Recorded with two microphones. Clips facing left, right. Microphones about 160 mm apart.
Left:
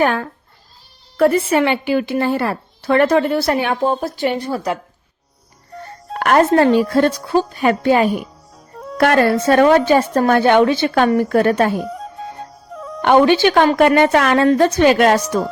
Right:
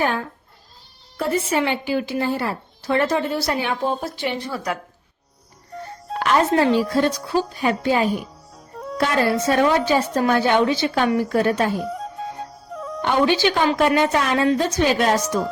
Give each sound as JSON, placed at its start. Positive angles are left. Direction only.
{"t": 0.0, "sound": "a woman's voice", "side_deg": 65}
{"t": 6.1, "sound": "a woman's voice", "side_deg": 55}
{"t": 8.7, "sound": "music", "side_deg": 0}
{"t": 9.0, "sound": "a woman's voice", "side_deg": 60}
{"t": 11.9, "sound": "music", "side_deg": 0}
{"t": 13.0, "sound": "a woman's voice", "side_deg": 60}